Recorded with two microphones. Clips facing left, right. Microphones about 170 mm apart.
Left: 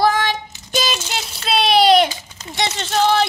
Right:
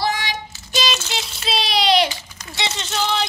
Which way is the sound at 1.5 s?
55° left (ahead or behind).